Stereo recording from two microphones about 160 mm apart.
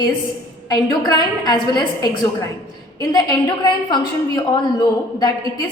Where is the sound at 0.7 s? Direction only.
25° left (ahead or behind).